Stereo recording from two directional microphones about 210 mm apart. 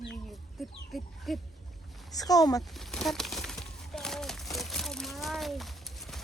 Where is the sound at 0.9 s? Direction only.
Centre (ahead or behind).